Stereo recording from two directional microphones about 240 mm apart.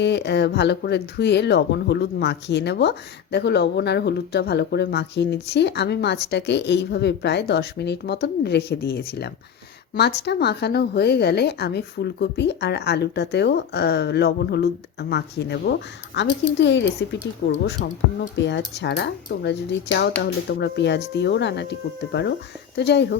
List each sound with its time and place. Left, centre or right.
0.0 s a woman's voice: left